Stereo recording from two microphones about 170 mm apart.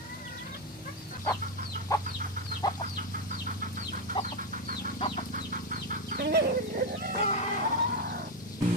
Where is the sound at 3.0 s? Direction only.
55° right (ahead or behind).